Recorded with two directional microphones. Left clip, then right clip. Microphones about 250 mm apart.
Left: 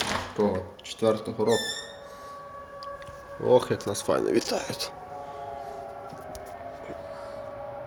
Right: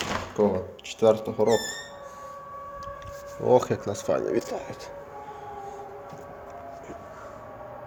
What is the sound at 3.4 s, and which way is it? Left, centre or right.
Speech, centre.